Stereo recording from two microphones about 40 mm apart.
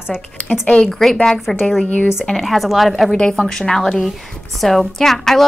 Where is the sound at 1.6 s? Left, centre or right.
Centre.